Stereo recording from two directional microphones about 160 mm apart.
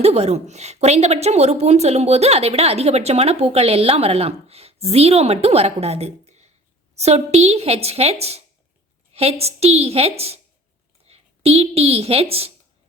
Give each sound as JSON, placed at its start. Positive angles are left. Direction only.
{"t": 0.0, "sound": "a woman's voice", "side_deg": -40}